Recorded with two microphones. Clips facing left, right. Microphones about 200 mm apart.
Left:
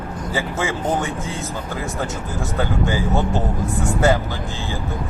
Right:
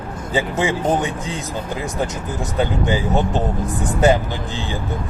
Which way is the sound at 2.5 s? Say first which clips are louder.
Right 2 dB; 20° right (ahead or behind).